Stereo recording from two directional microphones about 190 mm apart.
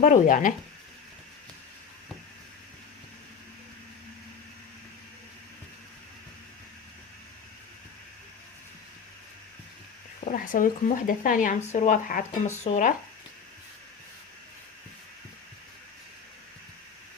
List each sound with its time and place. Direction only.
0.0 s speech: 45° left (ahead or behind)
10.2 s speech: 45° left (ahead or behind)